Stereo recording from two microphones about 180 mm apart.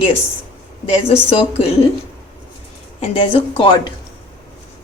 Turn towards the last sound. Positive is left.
turn(degrees=25)  # may be behind; listen again after turning